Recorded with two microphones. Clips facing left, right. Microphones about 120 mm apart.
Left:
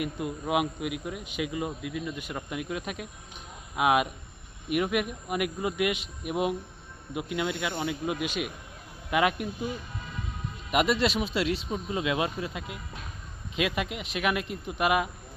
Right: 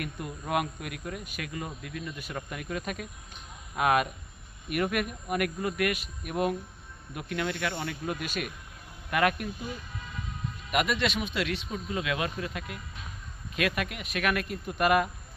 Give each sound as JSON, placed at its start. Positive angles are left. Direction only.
{"t": 0.0, "sound": "a man's voice", "side_deg": 10}
{"t": 10.7, "sound": "a man's voice", "side_deg": 25}